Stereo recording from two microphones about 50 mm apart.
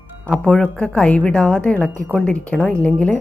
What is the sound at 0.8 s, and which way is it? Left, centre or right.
Speech, centre.